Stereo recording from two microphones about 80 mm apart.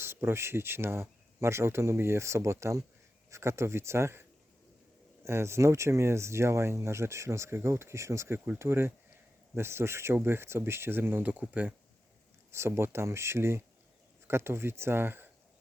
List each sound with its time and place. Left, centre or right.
0.0 s speech: right
5.2 s speech: right; by 11.7 s centre
12.5 s speech: right